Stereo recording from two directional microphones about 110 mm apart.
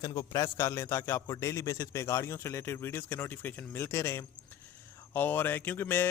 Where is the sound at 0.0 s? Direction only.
35° left (ahead or behind).